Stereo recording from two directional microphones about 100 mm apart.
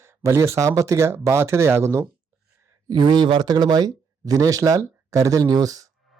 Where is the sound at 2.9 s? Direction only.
45° right (ahead or behind).